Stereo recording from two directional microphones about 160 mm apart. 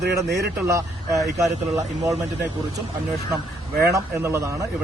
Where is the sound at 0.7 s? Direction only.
20° right (ahead or behind).